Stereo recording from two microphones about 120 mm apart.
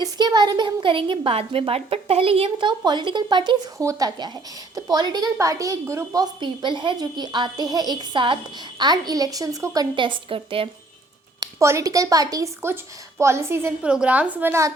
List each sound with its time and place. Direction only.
0.0 s a woman's voice: 35° right (ahead or behind)
6.4 s a woman's voice: 40° right (ahead or behind)
9.9 s a woman's voice: 45° right (ahead or behind)
11.3 s a woman's voice: 25° right (ahead or behind)
13.8 s a woman's voice: 10° right (ahead or behind)